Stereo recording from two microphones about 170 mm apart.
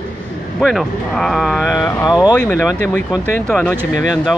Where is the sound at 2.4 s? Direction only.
10° left (ahead or behind).